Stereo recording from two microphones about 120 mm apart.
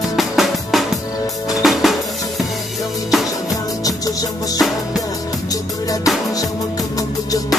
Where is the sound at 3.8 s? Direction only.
30° left (ahead or behind).